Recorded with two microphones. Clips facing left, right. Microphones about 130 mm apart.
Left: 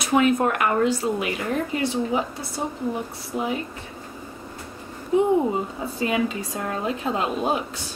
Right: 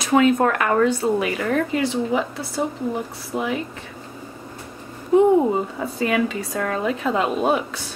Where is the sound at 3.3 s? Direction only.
50° right (ahead or behind).